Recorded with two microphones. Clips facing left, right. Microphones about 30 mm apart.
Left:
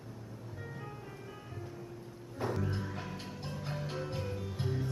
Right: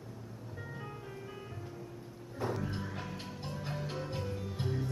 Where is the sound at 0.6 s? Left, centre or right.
Centre.